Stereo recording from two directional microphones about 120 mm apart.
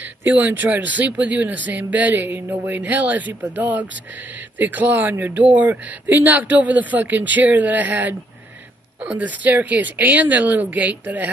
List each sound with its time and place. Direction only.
0.0 s speech: 15° right (ahead or behind)